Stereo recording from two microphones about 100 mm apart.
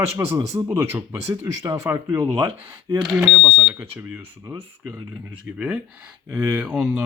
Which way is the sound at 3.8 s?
20° right (ahead or behind).